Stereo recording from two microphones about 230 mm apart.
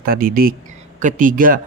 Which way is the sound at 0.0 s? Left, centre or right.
Right.